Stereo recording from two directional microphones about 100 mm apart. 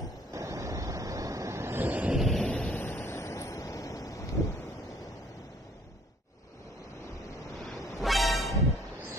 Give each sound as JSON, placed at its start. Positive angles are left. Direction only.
{"t": 0.3, "sound": "vehicle", "side_deg": -30}
{"t": 2.2, "sound": "a sound", "side_deg": 5}
{"t": 8.0, "sound": "music", "side_deg": 0}